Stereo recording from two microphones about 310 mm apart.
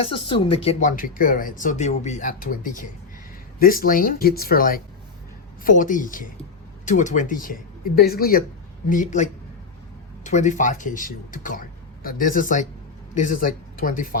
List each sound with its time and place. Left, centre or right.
0.0 s speech: centre